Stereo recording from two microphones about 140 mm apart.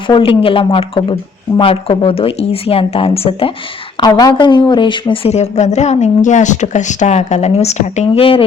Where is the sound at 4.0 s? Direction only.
30° left (ahead or behind).